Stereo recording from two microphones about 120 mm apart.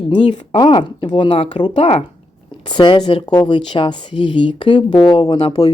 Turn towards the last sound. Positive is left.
turn(degrees=55)  # may be behind; listen again after turning